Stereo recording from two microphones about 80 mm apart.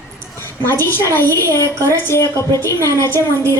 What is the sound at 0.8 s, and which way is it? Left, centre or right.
Speech, left.